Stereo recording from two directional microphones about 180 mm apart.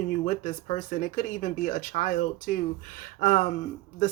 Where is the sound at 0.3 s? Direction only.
45° left (ahead or behind).